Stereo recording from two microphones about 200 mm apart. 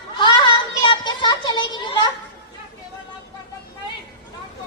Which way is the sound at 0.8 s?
20° left (ahead or behind).